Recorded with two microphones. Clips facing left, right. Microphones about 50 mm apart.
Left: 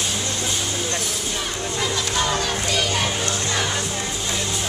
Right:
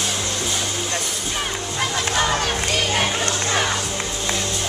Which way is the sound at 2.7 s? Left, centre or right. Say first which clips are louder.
Right 1 dB; right.